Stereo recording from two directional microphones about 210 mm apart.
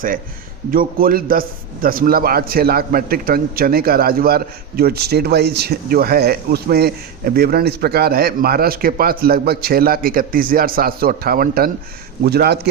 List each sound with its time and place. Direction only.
0.7 s a man's voice: 45° right (ahead or behind)